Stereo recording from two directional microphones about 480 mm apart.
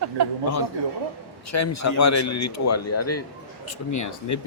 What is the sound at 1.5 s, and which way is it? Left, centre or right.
Speech, left.